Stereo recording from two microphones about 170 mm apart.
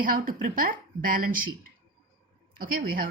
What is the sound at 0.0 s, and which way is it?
A woman's voice, 55° right (ahead or behind).